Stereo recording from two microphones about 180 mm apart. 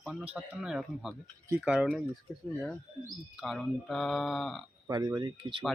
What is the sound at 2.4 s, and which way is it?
Speech, 5° left (ahead or behind).